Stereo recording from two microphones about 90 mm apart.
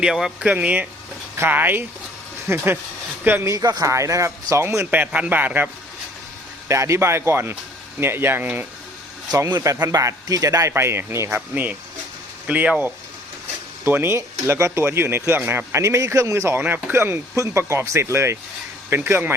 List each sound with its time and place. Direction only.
0.0 s a man's voice: 5° right (ahead or behind); by 2.6 s 30° right (ahead or behind)
3.4 s speech: 40° right (ahead or behind)
4.9 s a man's voice: 15° right (ahead or behind)
6.7 s a man's voice: 35° right (ahead or behind)
9.9 s speech: 35° right (ahead or behind)
12.5 s speech: 15° right (ahead or behind)
13.8 s a man's voice: 25° right (ahead or behind)